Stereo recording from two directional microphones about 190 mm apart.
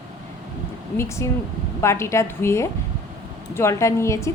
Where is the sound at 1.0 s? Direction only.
15° left (ahead or behind).